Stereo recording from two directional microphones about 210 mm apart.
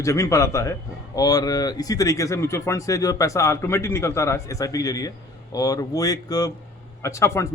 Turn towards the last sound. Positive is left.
turn(degrees=15)  # may be behind; listen again after turning